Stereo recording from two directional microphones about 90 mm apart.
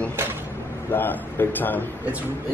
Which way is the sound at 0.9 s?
20° left (ahead or behind).